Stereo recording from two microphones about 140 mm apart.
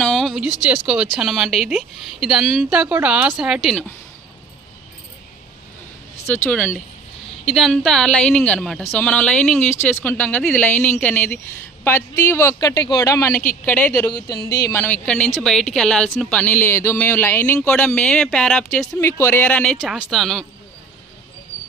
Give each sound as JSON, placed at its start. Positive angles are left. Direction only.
{"t": 0.0, "sound": "a sound", "side_deg": 5}
{"t": 1.2, "sound": "a woman's voice", "side_deg": 0}
{"t": 6.2, "sound": "speech", "side_deg": 15}
{"t": 7.4, "sound": "a woman's voice", "side_deg": 0}
{"t": 18.9, "sound": "a woman's voice", "side_deg": 20}